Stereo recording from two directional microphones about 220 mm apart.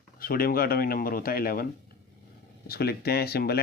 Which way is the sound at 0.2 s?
40° left (ahead or behind).